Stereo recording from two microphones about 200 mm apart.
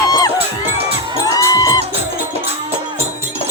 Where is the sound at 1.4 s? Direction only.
20° left (ahead or behind).